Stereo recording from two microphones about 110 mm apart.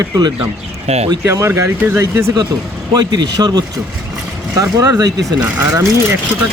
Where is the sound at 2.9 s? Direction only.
35° right (ahead or behind).